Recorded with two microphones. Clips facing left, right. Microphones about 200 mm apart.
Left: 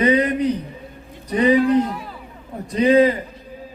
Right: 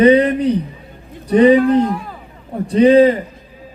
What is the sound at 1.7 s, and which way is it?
Speech, 55° right (ahead or behind).